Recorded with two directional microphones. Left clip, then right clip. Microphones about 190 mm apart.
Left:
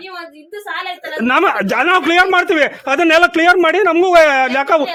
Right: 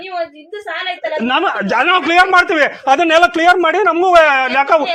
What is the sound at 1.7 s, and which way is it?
Speech, 30° left (ahead or behind).